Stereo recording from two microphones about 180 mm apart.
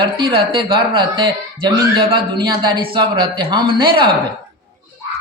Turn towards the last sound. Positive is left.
turn(degrees=-25)  # may be behind; listen again after turning